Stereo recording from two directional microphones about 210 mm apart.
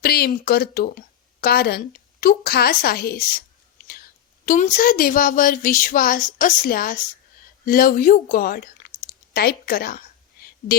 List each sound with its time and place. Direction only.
0.0 s speech: 45° left (ahead or behind)
4.4 s a woman's voice: 40° left (ahead or behind)